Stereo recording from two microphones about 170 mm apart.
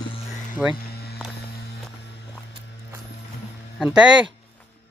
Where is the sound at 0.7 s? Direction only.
65° left (ahead or behind).